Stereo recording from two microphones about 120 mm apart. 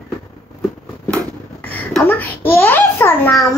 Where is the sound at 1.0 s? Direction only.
15° left (ahead or behind).